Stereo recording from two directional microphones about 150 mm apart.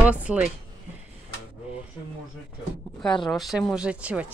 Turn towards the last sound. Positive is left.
turn(degrees=-10)  # may be behind; listen again after turning